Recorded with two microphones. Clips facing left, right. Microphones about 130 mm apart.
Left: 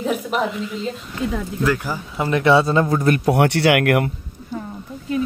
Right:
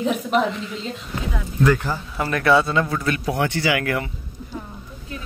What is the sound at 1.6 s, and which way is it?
Speech, 5° left (ahead or behind).